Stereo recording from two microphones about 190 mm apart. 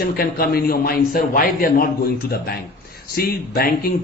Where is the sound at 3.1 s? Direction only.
55° left (ahead or behind).